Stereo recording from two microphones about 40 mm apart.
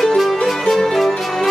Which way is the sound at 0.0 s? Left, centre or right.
Centre.